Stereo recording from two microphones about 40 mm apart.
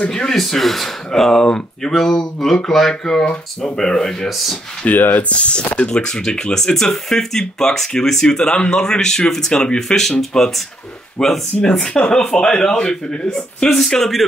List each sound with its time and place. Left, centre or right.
0.1 s speech: centre
4.8 s speech: left
5.3 s speech: left
9.8 s speech: centre
13.7 s speech: centre